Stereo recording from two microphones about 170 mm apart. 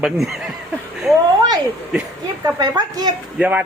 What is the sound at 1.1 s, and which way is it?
A woman's voice, 20° right (ahead or behind).